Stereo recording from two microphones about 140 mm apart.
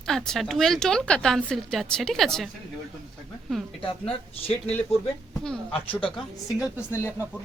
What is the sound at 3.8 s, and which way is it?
Speech, 40° left (ahead or behind).